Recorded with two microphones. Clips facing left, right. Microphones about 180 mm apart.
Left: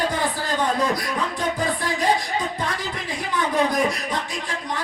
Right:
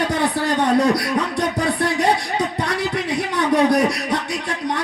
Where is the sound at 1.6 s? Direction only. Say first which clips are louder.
Right 6 dB; 70° right (ahead or behind).